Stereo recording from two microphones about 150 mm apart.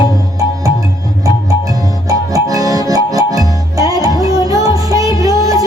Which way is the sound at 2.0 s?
20° right (ahead or behind).